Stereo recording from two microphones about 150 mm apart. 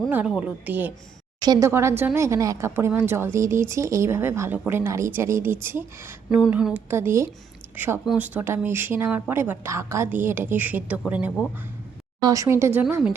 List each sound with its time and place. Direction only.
0.1 s speech: 10° right (ahead or behind)
1.4 s speech: 25° right (ahead or behind)
6.3 s speech: 5° right (ahead or behind)
6.9 s speech: 15° right (ahead or behind)
12.2 s speech: 20° right (ahead or behind)